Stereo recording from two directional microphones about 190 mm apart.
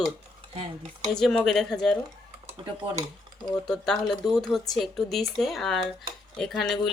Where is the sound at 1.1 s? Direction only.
5° left (ahead or behind).